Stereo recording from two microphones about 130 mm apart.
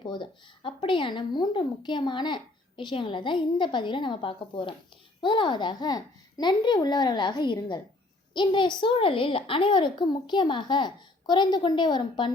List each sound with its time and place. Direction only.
0.0 s speech: 35° left (ahead or behind)